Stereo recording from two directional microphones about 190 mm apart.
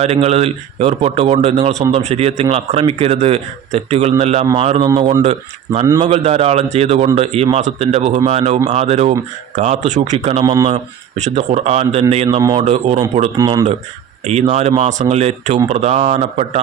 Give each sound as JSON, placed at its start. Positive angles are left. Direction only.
{"t": 0.0, "sound": "speech", "side_deg": -35}
{"t": 4.9, "sound": "speech", "side_deg": -20}
{"t": 10.4, "sound": "speech", "side_deg": -20}
{"t": 11.2, "sound": "speech", "side_deg": -35}
{"t": 13.3, "sound": "speech", "side_deg": -20}
{"t": 14.3, "sound": "speech", "side_deg": -35}